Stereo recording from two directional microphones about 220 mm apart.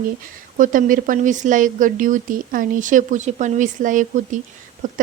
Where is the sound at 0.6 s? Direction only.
35° right (ahead or behind).